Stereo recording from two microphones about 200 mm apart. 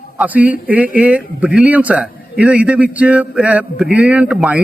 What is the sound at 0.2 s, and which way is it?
A man's voice, 5° right (ahead or behind).